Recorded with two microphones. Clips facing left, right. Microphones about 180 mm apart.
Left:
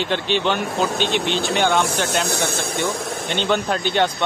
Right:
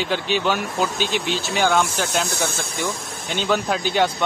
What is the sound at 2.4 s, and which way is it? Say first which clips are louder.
Speech: left 3 dB; 60° left (ahead or behind).